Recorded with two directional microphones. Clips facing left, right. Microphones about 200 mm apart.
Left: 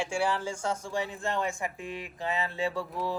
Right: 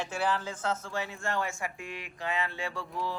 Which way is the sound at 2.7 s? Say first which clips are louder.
Left 3 dB; 5° left (ahead or behind).